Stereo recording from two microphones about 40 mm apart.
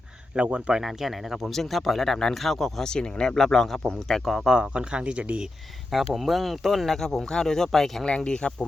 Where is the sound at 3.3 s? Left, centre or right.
Centre.